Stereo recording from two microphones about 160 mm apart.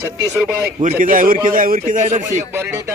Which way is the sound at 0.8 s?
55° right (ahead or behind).